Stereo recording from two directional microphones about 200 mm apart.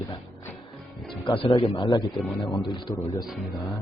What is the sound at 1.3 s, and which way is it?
A man's voice, 25° left (ahead or behind).